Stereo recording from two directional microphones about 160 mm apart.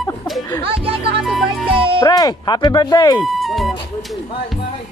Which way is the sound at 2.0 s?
25° left (ahead or behind).